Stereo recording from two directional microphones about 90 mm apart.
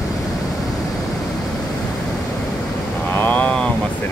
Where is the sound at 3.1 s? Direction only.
20° left (ahead or behind).